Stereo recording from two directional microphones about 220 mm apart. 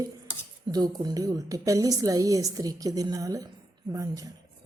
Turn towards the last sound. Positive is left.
turn(degrees=-15)  # may be behind; listen again after turning